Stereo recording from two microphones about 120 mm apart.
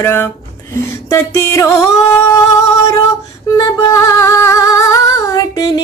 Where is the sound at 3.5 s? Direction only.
30° left (ahead or behind).